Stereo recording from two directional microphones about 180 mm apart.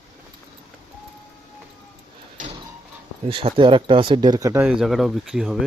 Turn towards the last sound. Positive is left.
turn(degrees=0)  # may be behind; listen again after turning